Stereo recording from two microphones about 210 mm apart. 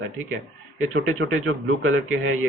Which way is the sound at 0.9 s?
70° right (ahead or behind).